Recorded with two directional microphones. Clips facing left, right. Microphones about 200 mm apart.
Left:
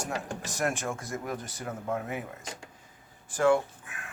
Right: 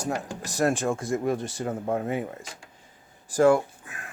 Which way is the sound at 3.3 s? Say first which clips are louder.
Right 5 dB; 40° right (ahead or behind).